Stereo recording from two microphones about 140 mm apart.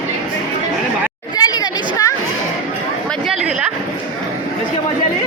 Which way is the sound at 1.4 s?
30° left (ahead or behind).